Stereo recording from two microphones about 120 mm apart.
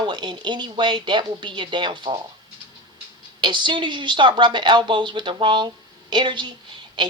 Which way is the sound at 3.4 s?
40° right (ahead or behind).